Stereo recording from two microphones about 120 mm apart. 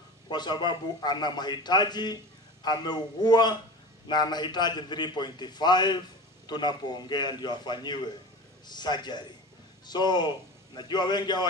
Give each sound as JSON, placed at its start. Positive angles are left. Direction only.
{"t": 0.3, "sound": "a man's voice", "side_deg": 40}